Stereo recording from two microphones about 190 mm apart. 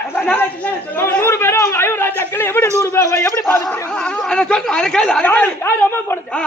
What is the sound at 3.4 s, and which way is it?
Chatter, 15° left (ahead or behind).